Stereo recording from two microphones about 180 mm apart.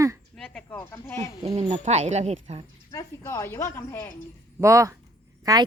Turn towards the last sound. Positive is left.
turn(degrees=-20)  # may be behind; listen again after turning